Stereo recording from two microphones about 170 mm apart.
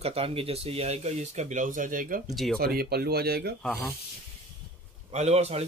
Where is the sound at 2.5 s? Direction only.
65° right (ahead or behind).